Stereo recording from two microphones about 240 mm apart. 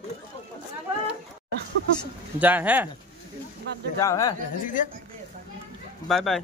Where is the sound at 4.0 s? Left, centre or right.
Centre.